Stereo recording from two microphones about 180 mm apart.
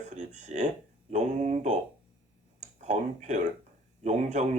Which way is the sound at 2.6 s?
40° right (ahead or behind).